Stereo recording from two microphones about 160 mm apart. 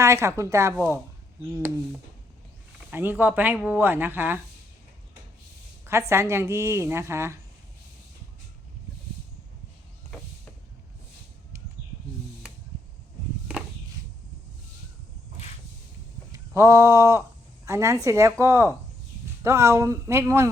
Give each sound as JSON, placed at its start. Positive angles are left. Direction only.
{"t": 0.0, "sound": "speech", "side_deg": -20}
{"t": 2.9, "sound": "speech", "side_deg": -10}
{"t": 5.8, "sound": "speech", "side_deg": -15}
{"t": 16.3, "sound": "a sound", "side_deg": -20}
{"t": 17.7, "sound": "speech", "side_deg": -20}